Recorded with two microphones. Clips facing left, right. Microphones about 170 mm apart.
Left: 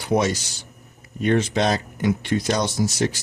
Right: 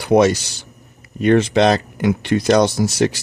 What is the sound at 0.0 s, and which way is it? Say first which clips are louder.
Speech: right 8 dB; 70° right (ahead or behind).